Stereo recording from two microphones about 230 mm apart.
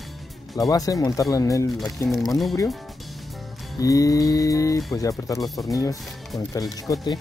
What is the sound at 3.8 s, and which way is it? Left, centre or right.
Mantra, centre.